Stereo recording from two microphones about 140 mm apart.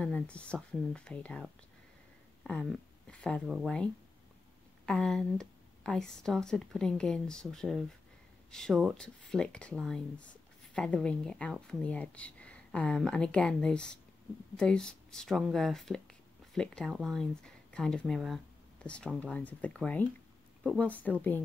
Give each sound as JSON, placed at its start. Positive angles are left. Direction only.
{"t": 0.0, "sound": "a woman's voice", "side_deg": 10}
{"t": 2.4, "sound": "a woman's voice", "side_deg": 0}
{"t": 3.4, "sound": "a woman's voice", "side_deg": -5}
{"t": 4.8, "sound": "a woman's voice", "side_deg": 5}